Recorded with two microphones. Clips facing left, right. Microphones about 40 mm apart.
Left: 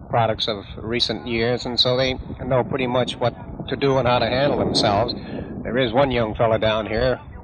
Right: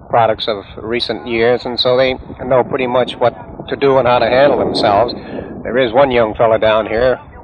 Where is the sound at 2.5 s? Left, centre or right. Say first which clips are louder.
Right 8 dB; centre.